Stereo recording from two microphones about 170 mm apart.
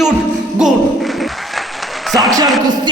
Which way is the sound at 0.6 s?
5° right (ahead or behind).